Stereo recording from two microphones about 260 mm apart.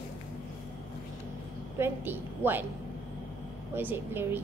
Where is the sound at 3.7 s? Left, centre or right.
Centre.